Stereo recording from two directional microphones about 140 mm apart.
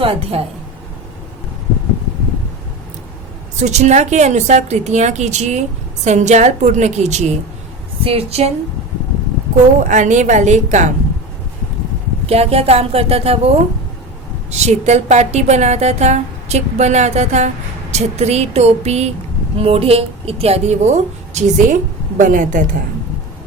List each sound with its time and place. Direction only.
0.0 s a woman's voice: 45° right (ahead or behind)
3.6 s a woman's voice: 55° right (ahead or behind)
9.8 s a woman's voice: 60° right (ahead or behind)
12.2 s a woman's voice: 50° right (ahead or behind)
14.5 s a woman's voice: 50° right (ahead or behind)
22.2 s a woman's voice: 70° right (ahead or behind)